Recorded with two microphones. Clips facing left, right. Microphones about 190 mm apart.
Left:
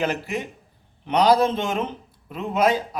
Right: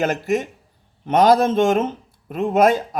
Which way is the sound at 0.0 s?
45° right (ahead or behind).